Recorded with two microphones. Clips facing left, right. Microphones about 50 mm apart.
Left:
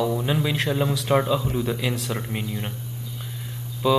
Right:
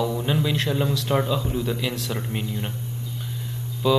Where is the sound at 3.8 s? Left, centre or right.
Centre.